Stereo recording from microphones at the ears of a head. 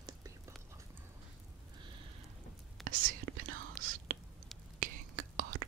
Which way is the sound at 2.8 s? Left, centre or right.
Right.